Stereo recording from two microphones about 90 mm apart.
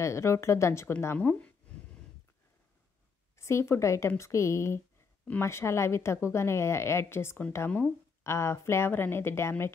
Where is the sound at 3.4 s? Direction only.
30° left (ahead or behind).